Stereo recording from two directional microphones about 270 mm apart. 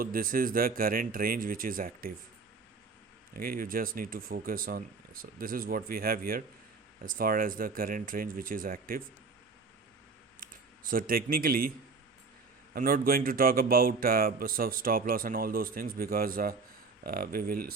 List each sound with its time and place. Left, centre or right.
0.0 s speech: right
3.3 s speech: right
10.4 s speech: right
12.7 s speech: right